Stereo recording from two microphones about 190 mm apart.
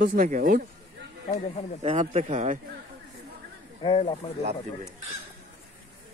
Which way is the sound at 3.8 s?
25° left (ahead or behind).